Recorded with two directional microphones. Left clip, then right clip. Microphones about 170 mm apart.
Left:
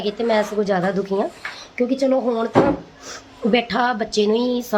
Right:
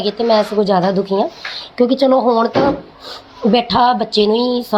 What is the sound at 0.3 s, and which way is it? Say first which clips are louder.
Speech: right 6 dB; 5° right (ahead or behind).